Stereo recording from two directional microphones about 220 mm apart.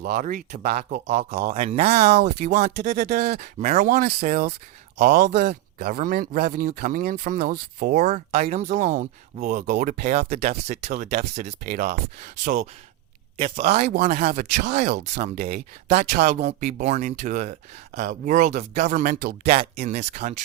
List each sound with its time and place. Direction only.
0.0 s speech: 40° right (ahead or behind)
15.1 s speech: 30° right (ahead or behind)